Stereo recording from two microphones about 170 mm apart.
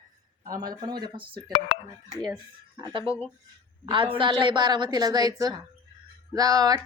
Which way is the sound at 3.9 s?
30° right (ahead or behind).